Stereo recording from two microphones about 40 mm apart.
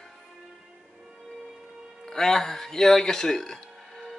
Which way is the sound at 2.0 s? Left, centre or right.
Centre.